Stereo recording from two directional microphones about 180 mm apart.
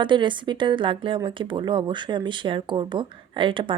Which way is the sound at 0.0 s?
25° right (ahead or behind).